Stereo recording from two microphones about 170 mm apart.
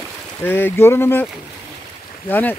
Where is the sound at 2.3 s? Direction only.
10° left (ahead or behind).